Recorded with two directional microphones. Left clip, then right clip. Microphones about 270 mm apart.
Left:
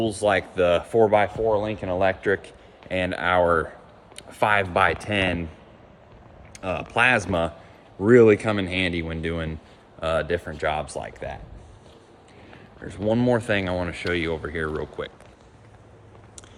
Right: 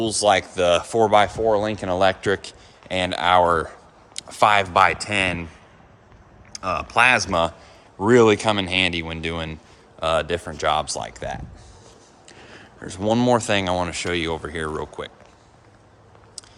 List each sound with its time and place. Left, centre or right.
0.0 s speech: right
0.3 s speech: centre
1.5 s speech: right
2.0 s speech: centre
6.5 s speech: centre
12.8 s speech: centre